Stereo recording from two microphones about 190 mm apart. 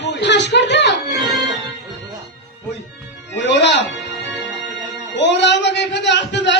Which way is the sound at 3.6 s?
65° left (ahead or behind).